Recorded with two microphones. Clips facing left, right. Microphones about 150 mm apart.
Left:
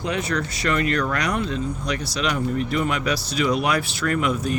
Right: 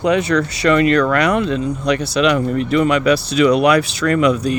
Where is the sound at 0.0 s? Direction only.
75° right (ahead or behind).